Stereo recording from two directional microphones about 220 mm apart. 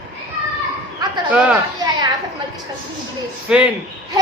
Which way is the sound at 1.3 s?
5° right (ahead or behind).